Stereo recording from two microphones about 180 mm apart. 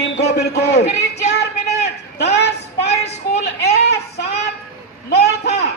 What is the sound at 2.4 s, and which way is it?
Child singing, 70° left (ahead or behind).